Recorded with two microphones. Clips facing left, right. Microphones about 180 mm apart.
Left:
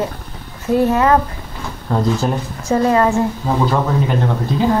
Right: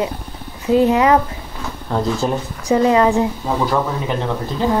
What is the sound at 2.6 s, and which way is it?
Speech, 15° right (ahead or behind).